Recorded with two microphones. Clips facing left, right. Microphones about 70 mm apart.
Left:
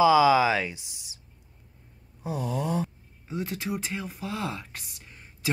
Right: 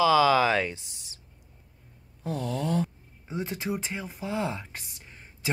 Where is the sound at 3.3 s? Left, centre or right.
Centre.